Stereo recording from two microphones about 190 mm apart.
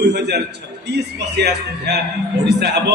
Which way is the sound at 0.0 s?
60° right (ahead or behind).